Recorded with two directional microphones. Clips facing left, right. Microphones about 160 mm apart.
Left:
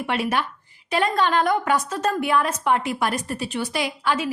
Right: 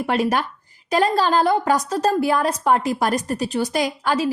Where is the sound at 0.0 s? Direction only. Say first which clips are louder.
Right 4 dB; 40° right (ahead or behind).